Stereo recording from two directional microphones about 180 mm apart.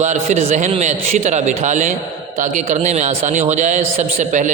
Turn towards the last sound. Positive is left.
turn(degrees=-40)  # may be behind; listen again after turning